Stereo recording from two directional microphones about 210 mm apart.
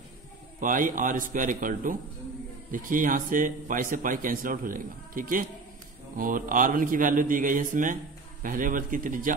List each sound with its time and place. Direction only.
0.6 s a man's voice: 40° right (ahead or behind)